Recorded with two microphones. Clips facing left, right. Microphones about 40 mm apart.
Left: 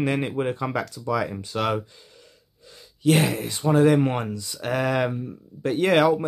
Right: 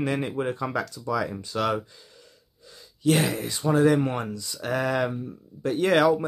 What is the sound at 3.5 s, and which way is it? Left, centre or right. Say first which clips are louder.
Speech: left 2 dB; left.